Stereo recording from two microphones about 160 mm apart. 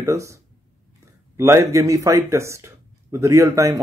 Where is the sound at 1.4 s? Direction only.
20° right (ahead or behind).